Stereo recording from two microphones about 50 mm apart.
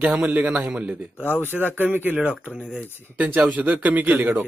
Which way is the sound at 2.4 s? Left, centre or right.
Right.